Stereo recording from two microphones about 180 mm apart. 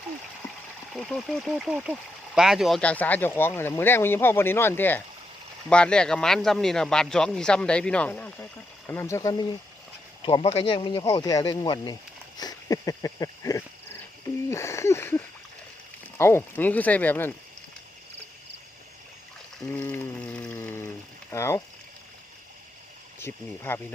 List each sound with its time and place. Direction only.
0.9 s speech: centre (ahead or behind); by 9.5 s 15° left (ahead or behind)
10.2 s speech: 30° left (ahead or behind)
12.4 s a sound: 20° left (ahead or behind)
14.5 s speech: 15° left (ahead or behind)
19.7 s a sound: 10° left (ahead or behind)
21.3 s speech: 15° left (ahead or behind)
23.2 s speech: 15° left (ahead or behind)